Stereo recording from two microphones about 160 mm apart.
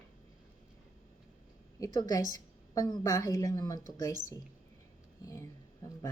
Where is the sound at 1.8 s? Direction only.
25° left (ahead or behind).